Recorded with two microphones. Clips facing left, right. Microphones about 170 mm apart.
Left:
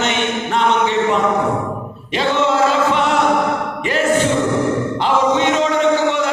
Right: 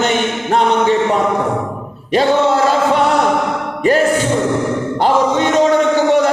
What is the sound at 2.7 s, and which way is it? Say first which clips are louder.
Chant: right 3 dB; 40° right (ahead or behind).